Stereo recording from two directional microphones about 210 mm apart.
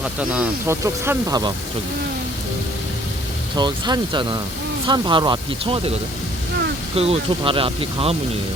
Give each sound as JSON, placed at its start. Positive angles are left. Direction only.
{"t": 0.0, "sound": "speech", "side_deg": -5}
{"t": 3.5, "sound": "speech", "side_deg": -20}
{"t": 6.9, "sound": "speech", "side_deg": -30}